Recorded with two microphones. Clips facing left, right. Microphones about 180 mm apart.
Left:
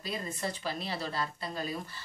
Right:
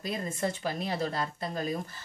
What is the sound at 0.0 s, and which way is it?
Speech, 50° right (ahead or behind).